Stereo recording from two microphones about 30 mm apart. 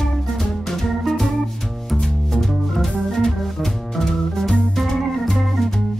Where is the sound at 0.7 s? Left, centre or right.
Centre.